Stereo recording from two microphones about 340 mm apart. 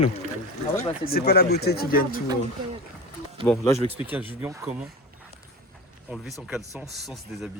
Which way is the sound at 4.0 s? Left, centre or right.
Centre.